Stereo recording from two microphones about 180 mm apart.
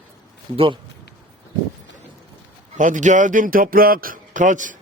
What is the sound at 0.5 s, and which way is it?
Speech, 30° right (ahead or behind).